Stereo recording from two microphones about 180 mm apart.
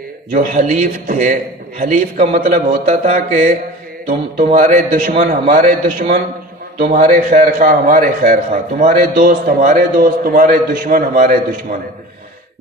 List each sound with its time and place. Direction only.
0.3 s a man's voice: 50° right (ahead or behind)
2.8 s a sound: 40° right (ahead or behind)
4.5 s a man's voice: 40° right (ahead or behind)